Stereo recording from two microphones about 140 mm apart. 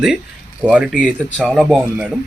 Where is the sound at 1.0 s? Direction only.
5° left (ahead or behind).